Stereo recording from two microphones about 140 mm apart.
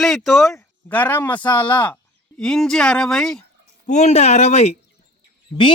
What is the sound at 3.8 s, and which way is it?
Speech, 55° left (ahead or behind).